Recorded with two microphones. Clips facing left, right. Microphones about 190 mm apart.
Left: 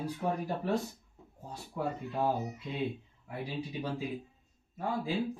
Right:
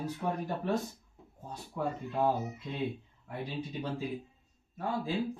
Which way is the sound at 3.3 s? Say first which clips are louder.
Even; 10° left (ahead or behind).